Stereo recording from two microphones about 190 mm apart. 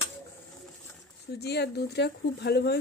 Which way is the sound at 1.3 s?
60° left (ahead or behind).